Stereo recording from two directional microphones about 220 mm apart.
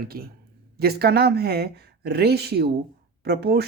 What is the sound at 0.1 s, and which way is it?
Speech, 40° right (ahead or behind).